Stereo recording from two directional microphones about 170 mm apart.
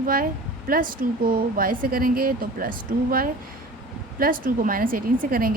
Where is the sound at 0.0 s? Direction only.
55° right (ahead or behind).